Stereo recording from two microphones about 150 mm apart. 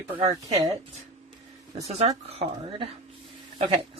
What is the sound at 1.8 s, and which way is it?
A man's voice, 45° right (ahead or behind).